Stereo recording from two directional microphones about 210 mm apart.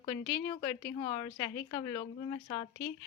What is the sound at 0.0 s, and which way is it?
A woman's voice, 25° left (ahead or behind).